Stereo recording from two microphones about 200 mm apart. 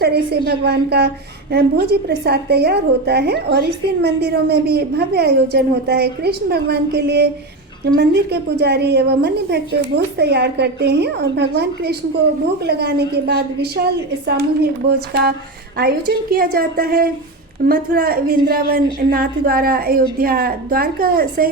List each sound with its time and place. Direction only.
0.0 s a woman's voice: 55° right (ahead or behind)